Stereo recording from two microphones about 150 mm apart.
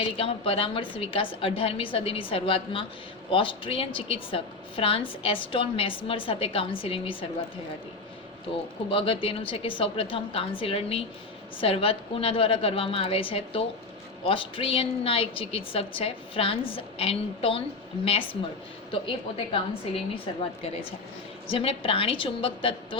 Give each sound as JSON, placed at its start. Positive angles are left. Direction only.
{"t": 0.0, "sound": "a woman's voice", "side_deg": 40}
{"t": 8.5, "sound": "a woman's voice", "side_deg": 40}